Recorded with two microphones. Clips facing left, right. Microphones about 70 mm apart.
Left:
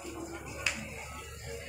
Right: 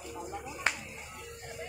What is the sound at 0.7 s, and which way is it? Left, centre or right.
Music, right.